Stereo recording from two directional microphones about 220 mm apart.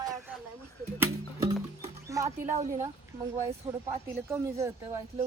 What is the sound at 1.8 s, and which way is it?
Music, 15° right (ahead or behind).